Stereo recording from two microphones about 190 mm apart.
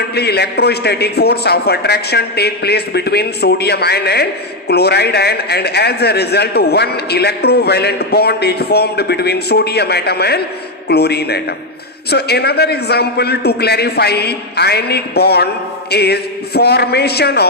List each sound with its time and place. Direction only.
0.1 s a man's voice: 60° left (ahead or behind)